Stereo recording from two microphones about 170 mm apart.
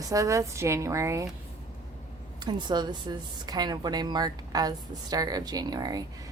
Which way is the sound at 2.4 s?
25° right (ahead or behind).